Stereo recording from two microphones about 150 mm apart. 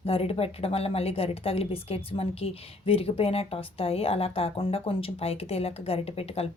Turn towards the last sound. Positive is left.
turn(degrees=40)  # may be behind; listen again after turning